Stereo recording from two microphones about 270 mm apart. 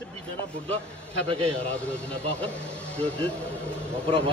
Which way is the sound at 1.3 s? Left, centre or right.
Right.